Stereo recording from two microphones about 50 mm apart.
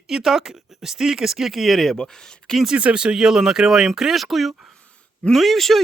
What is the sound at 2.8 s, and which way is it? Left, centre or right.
Speech, right.